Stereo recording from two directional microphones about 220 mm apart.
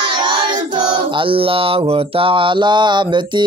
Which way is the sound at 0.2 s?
20° right (ahead or behind).